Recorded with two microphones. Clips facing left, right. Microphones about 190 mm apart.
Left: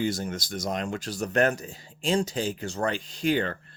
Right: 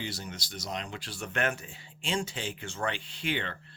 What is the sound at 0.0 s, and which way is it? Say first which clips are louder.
Speech: left 10 dB; 50° left (ahead or behind).